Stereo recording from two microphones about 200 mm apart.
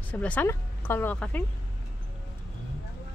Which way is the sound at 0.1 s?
10° left (ahead or behind).